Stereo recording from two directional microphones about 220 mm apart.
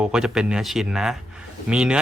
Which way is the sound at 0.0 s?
5° right (ahead or behind).